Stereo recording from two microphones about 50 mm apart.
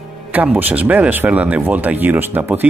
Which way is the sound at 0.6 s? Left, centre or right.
Right.